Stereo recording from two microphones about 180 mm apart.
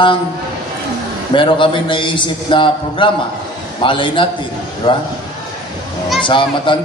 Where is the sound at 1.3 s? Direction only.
30° left (ahead or behind).